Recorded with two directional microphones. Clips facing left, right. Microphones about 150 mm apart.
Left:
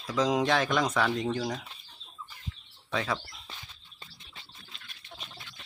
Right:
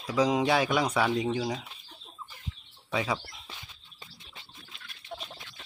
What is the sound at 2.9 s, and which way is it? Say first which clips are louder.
Speech: right 1 dB; 10° right (ahead or behind).